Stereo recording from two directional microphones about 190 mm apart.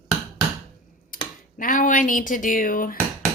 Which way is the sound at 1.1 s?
45° left (ahead or behind).